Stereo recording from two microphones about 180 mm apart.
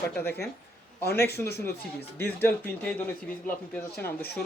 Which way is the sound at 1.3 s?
65° left (ahead or behind).